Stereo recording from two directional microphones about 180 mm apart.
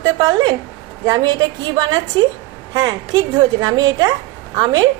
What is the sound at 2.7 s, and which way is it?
A woman's voice, 25° right (ahead or behind).